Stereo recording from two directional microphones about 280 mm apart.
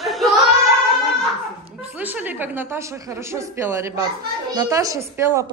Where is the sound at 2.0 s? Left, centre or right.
Centre.